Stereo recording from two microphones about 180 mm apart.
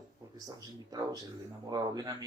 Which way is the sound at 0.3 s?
20° right (ahead or behind).